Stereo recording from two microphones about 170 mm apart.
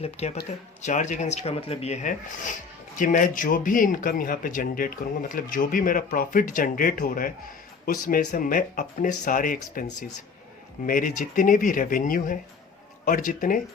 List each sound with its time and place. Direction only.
0.0 s speech: 40° left (ahead or behind); by 9.8 s 55° left (ahead or behind)
10.8 s speech: 50° left (ahead or behind)